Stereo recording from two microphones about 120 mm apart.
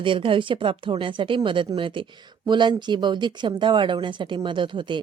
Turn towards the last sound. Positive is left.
turn(degrees=-40)  # may be behind; listen again after turning